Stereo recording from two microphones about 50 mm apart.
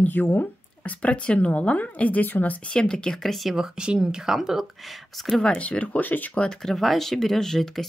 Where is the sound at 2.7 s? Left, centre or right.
Centre.